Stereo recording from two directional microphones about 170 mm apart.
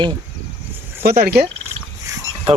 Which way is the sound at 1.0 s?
65° right (ahead or behind).